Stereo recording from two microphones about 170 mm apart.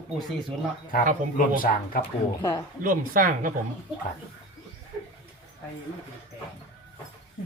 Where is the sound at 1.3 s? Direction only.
55° left (ahead or behind).